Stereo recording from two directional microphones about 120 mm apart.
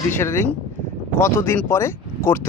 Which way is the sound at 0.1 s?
20° left (ahead or behind).